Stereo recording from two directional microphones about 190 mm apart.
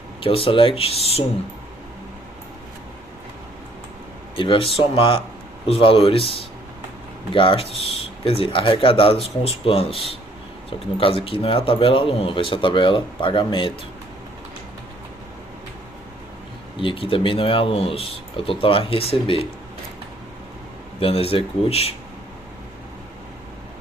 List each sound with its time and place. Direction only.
0.2 s a man's voice: 30° left (ahead or behind)
4.4 s a man's voice: 25° left (ahead or behind)
16.7 s a man's voice: 25° left (ahead or behind)
21.0 s speech: 30° left (ahead or behind)